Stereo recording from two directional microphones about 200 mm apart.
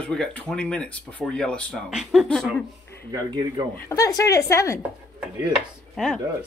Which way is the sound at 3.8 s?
15° left (ahead or behind).